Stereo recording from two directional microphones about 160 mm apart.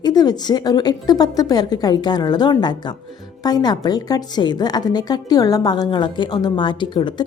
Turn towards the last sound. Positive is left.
turn(degrees=30)  # may be behind; listen again after turning